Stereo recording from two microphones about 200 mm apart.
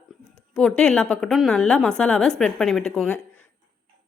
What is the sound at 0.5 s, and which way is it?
A woman's voice, 5° left (ahead or behind).